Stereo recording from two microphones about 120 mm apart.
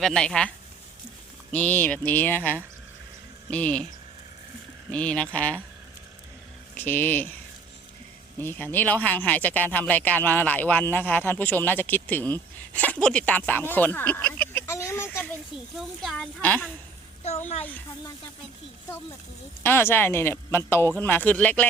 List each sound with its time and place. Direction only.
0.0 s speech: 5° left (ahead or behind)
1.5 s speech: 15° left (ahead or behind)
4.9 s speech: 10° left (ahead or behind)
6.7 s speech: 15° left (ahead or behind)
8.4 s speech: 15° left (ahead or behind)
15.8 s speech: centre (ahead or behind)
19.6 s a woman's voice: 20° left (ahead or behind)